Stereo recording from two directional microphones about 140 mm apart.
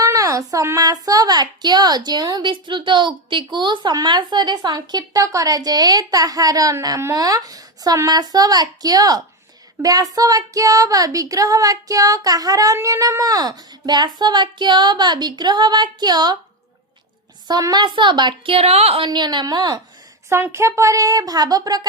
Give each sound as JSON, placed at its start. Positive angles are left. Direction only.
{"t": 0.0, "sound": "speech", "side_deg": -25}
{"t": 17.5, "sound": "a woman's voice", "side_deg": -30}
{"t": 20.3, "sound": "speech", "side_deg": -20}